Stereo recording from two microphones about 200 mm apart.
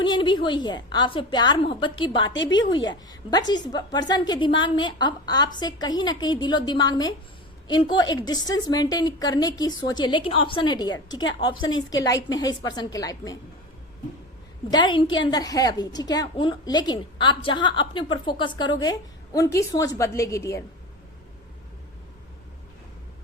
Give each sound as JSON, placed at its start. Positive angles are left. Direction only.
{"t": 0.0, "sound": "a woman's voice", "side_deg": 25}
{"t": 2.3, "sound": "a woman's voice", "side_deg": 65}
{"t": 3.1, "sound": "a woman's voice", "side_deg": 20}
{"t": 11.2, "sound": "a woman's voice", "side_deg": 70}
{"t": 12.4, "sound": "a woman's voice", "side_deg": 20}
{"t": 14.7, "sound": "a woman's voice", "side_deg": 25}